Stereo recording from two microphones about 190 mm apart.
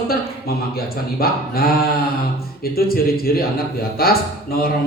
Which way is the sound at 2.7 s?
50° left (ahead or behind).